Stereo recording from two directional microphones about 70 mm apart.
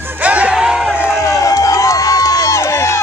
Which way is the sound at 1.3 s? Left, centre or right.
Left.